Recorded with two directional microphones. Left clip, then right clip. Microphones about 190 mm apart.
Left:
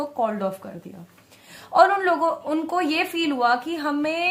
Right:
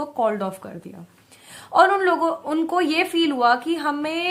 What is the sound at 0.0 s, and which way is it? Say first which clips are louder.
A woman's voice: right 2 dB; 30° right (ahead or behind).